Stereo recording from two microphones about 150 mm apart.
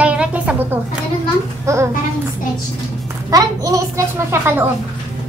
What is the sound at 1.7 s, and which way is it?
Speech, 20° right (ahead or behind).